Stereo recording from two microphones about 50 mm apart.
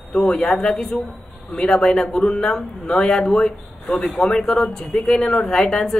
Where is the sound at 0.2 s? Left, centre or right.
Centre.